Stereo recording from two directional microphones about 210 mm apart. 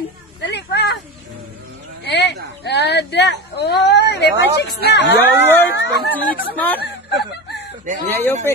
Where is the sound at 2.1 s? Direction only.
55° left (ahead or behind).